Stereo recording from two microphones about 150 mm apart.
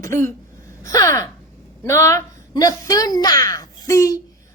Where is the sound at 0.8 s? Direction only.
20° left (ahead or behind).